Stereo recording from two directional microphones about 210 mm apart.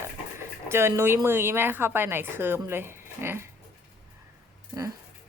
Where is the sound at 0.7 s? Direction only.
10° right (ahead or behind).